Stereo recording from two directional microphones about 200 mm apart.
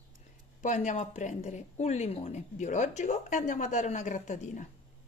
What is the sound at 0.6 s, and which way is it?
Speech, 40° left (ahead or behind).